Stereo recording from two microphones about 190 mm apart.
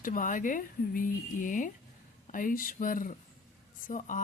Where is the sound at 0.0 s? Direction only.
45° left (ahead or behind).